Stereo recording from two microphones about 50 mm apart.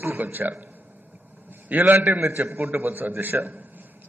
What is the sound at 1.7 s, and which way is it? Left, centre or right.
A man's voice, right.